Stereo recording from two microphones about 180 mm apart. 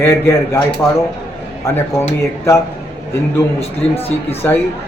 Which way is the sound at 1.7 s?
15° left (ahead or behind).